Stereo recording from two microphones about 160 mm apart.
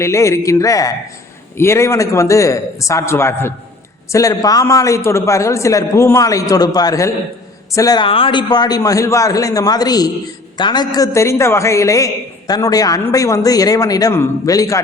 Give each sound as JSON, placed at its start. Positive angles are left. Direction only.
{"t": 0.0, "sound": "a man's voice", "side_deg": 20}
{"t": 8.0, "sound": "a man's voice", "side_deg": 35}